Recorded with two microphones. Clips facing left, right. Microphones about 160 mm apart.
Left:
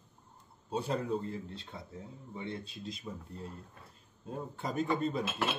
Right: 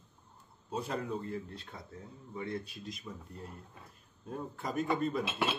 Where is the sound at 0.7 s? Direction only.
30° left (ahead or behind).